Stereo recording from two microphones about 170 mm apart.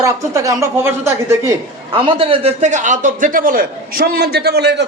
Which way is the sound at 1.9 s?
30° right (ahead or behind).